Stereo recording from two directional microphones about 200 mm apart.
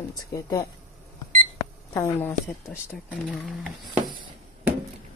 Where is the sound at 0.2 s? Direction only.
15° left (ahead or behind).